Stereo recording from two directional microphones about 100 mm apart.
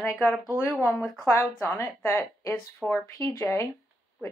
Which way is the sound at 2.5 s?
15° left (ahead or behind).